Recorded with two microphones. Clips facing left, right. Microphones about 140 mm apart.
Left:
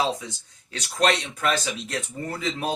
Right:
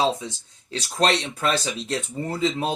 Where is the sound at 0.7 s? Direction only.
30° right (ahead or behind).